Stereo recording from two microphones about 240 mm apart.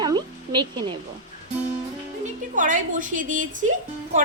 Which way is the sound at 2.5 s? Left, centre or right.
Right.